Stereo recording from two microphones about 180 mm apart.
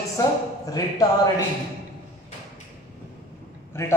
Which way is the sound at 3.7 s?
15° left (ahead or behind).